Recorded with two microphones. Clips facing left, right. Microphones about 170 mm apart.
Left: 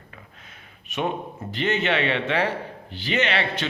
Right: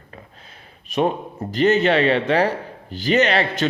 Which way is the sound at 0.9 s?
35° right (ahead or behind).